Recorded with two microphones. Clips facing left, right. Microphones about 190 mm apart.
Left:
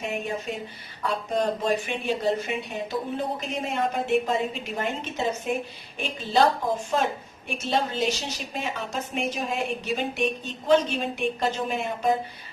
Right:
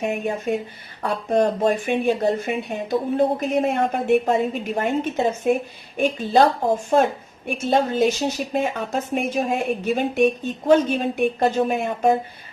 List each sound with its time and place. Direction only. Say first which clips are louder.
0.0 s a woman's voice: right 6 dB; 50° right (ahead or behind)